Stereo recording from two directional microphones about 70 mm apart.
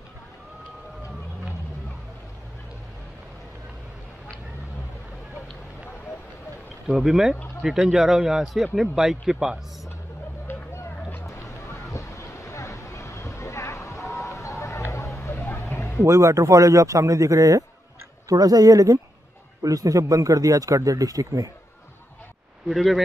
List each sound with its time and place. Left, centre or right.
6.9 s a man's voice: centre
10.4 s a sound: left
16.1 s a man's voice: right
22.7 s a man's voice: centre